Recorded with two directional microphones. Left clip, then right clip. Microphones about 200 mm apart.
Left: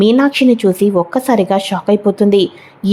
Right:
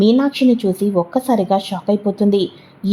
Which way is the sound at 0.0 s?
15° left (ahead or behind).